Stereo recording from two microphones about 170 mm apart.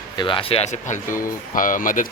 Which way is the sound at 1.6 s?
50° left (ahead or behind).